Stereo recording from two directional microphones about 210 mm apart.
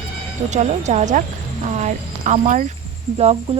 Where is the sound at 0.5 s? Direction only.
35° right (ahead or behind).